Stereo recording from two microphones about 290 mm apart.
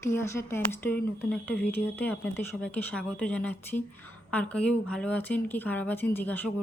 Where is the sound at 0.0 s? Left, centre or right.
Centre.